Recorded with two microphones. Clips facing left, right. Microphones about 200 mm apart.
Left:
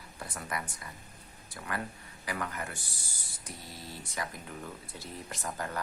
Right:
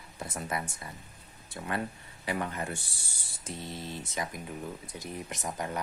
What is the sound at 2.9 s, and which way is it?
Speech, 65° right (ahead or behind).